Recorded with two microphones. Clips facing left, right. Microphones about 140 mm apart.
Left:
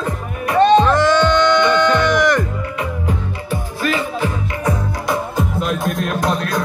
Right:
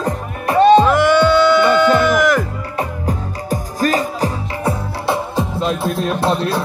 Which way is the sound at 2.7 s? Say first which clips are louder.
Right 3 dB; 40° right (ahead or behind).